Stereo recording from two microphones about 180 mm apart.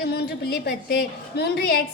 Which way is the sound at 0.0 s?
65° left (ahead or behind).